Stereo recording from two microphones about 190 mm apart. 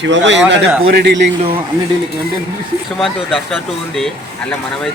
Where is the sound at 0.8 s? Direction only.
60° right (ahead or behind).